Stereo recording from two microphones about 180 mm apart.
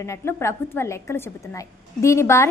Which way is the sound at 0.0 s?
15° left (ahead or behind).